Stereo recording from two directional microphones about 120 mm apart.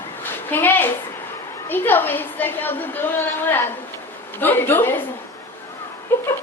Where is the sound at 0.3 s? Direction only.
15° left (ahead or behind).